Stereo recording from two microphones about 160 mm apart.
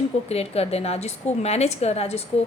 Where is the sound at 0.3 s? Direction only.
40° left (ahead or behind).